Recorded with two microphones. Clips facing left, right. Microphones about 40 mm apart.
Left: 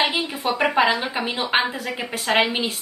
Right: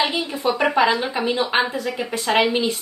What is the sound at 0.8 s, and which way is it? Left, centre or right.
Speech, left.